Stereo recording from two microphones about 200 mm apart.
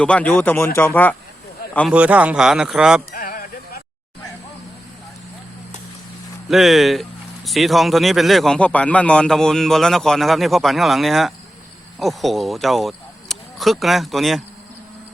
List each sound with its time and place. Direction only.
0.0 s speech: 5° left (ahead or behind)
1.9 s speech: 5° right (ahead or behind)
3.1 s music: 45° left (ahead or behind)
6.5 s speech: centre (ahead or behind)